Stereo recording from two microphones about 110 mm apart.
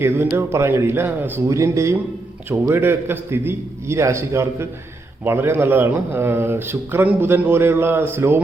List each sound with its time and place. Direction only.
0.0 s speech: 20° right (ahead or behind)